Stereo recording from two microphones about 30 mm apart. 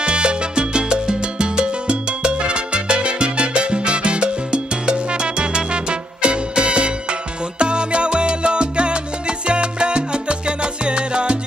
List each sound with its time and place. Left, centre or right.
0.0 s salsa music: right